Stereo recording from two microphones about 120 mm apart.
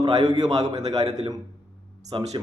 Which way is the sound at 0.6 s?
30° right (ahead or behind).